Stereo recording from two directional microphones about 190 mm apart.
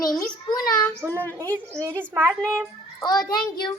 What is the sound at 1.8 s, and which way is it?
Speech, 15° right (ahead or behind).